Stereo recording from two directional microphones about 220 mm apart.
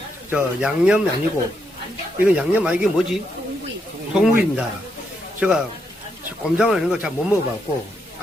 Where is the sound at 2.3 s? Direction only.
5° right (ahead or behind).